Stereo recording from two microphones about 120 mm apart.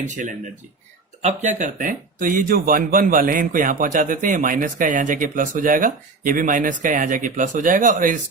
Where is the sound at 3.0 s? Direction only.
90° right.